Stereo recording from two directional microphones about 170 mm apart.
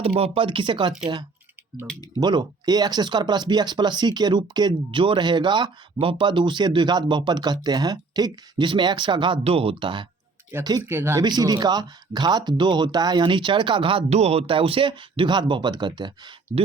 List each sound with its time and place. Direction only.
0.0 s speech: 35° right (ahead or behind)
1.9 s speech: 5° left (ahead or behind)
2.2 s speech: 25° right (ahead or behind)